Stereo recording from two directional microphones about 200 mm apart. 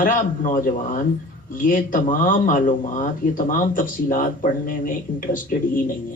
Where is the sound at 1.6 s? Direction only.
40° left (ahead or behind).